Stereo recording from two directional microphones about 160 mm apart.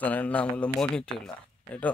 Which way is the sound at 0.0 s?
10° left (ahead or behind).